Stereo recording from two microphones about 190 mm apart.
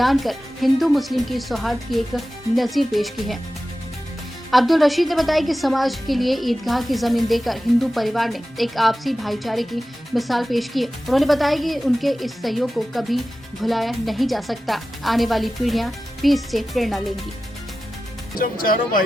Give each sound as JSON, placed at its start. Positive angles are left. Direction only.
{"t": 0.0, "sound": "speech", "side_deg": 0}
{"t": 4.5, "sound": "speech", "side_deg": 0}
{"t": 18.3, "sound": "speech", "side_deg": 50}